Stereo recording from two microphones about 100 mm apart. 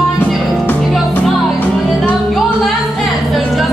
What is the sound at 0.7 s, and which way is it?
Music, centre (ahead or behind).